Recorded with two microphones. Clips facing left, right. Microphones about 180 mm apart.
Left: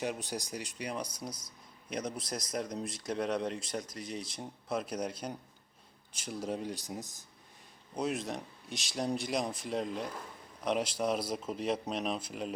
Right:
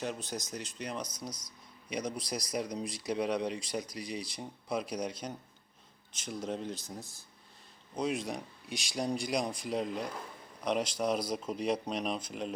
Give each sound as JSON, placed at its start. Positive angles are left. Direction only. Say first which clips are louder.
{"t": 0.0, "sound": "speech", "louder": "left 1 dB", "side_deg": 10}
{"t": 1.3, "sound": "speech", "louder": "even", "side_deg": 25}
{"t": 1.9, "sound": "speech", "louder": "right 1 dB", "side_deg": 0}
{"t": 7.9, "sound": "speech", "louder": "right 1 dB", "side_deg": 5}